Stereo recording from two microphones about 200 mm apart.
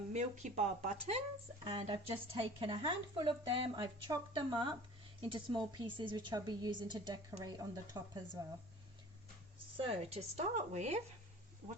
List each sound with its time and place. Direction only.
0.1 s a woman's voice: 35° right (ahead or behind); by 8.2 s 20° right (ahead or behind)
9.7 s speech: 30° right (ahead or behind)